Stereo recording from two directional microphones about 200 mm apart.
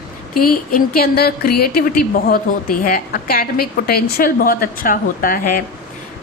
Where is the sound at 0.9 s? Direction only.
50° left (ahead or behind).